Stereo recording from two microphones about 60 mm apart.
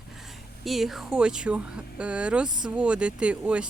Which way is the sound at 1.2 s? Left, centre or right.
Centre.